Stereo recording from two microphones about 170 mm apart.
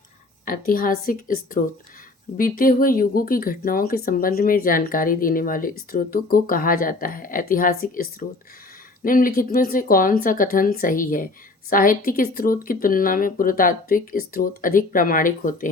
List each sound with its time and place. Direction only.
0.4 s speech: 55° left (ahead or behind)
9.0 s speech: 55° left (ahead or behind)